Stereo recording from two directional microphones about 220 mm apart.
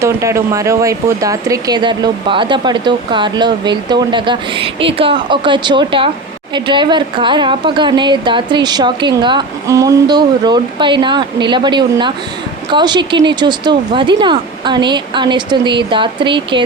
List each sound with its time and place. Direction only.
0.0 s speech: 15° right (ahead or behind)